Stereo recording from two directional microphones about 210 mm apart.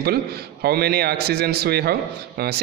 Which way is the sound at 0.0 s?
50° right (ahead or behind).